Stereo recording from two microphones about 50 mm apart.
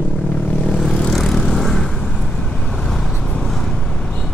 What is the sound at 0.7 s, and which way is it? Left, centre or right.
Vehicle, centre.